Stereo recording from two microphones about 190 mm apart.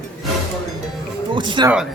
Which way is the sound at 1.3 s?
25° right (ahead or behind).